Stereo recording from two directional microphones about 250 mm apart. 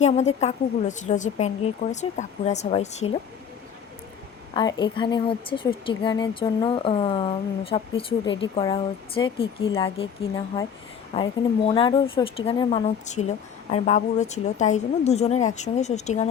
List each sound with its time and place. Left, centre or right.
0.0 s a woman's voice: left
4.5 s a woman's voice: centre